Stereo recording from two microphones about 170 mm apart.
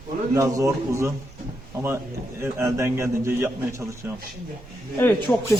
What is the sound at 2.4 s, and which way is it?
A man's voice, 15° right (ahead or behind).